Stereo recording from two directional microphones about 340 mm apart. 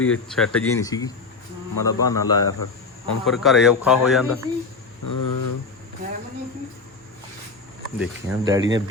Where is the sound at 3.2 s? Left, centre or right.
Centre.